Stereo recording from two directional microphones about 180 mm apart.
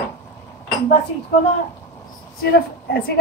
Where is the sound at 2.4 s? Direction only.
60° left (ahead or behind).